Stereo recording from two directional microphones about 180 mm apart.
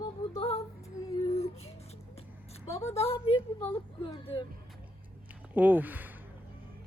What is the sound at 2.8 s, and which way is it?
Speech, 35° left (ahead or behind).